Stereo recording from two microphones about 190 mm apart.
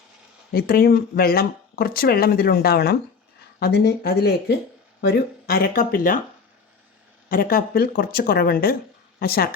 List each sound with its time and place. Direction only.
0.5 s speech: 55° left (ahead or behind)
7.3 s speech: 50° left (ahead or behind)